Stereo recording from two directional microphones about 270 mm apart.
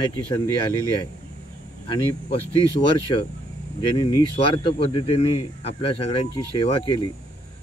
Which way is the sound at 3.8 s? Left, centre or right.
Centre.